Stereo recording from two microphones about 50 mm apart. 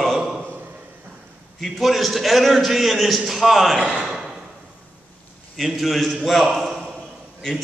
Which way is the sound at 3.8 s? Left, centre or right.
Centre.